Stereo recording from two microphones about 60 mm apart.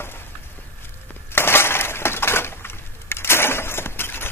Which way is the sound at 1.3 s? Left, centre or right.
Left.